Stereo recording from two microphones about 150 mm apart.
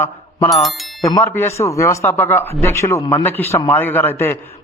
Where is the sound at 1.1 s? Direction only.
20° left (ahead or behind).